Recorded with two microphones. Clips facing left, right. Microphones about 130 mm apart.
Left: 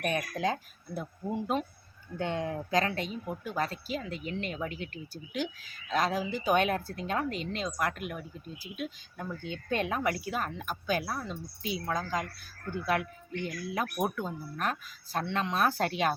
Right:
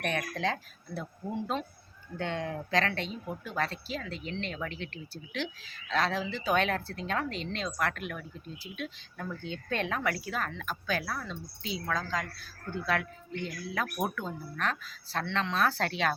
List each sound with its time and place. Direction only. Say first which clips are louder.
0.0 s speech: left 1 dB; 15° left (ahead or behind)
5.9 s speech: left 1 dB; 15° left (ahead or behind)